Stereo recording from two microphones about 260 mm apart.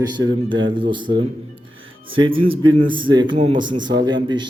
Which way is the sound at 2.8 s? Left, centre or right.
Centre.